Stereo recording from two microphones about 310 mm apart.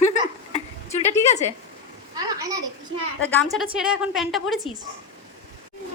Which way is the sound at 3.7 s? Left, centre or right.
Centre.